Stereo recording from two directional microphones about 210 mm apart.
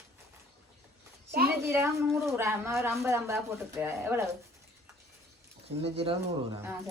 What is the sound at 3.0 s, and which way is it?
Speech, 10° right (ahead or behind).